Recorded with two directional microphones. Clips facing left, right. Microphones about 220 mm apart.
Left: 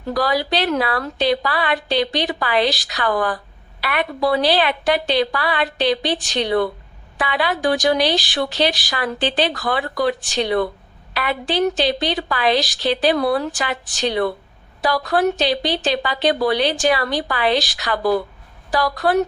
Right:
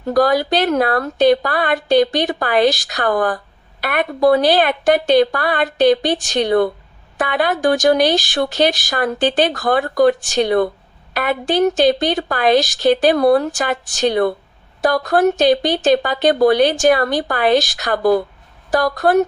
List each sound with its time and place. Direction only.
0.0 s a woman's voice: 45° right (ahead or behind)